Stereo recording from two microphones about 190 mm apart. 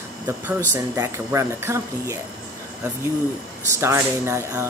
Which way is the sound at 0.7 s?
15° right (ahead or behind).